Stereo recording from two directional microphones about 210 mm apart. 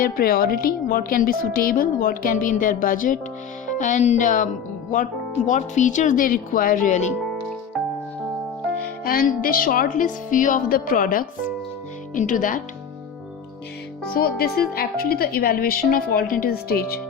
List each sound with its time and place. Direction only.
0.0 s speech: 45° left (ahead or behind)
5.5 s speech: 35° left (ahead or behind)
9.0 s speech: 45° left (ahead or behind)
14.1 s speech: 45° left (ahead or behind)